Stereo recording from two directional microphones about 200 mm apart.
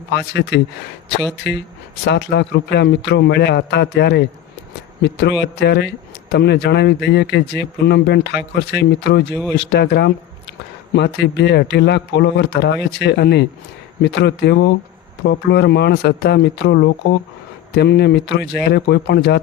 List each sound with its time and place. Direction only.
0.1 s speech: 60° left (ahead or behind)
2.0 s speech: 55° left (ahead or behind)